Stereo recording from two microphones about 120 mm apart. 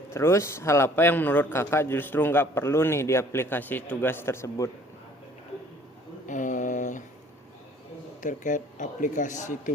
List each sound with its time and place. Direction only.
0.1 s a man's voice: 20° left (ahead or behind)
6.2 s a sound: 90° left
8.2 s a man's voice: 90° left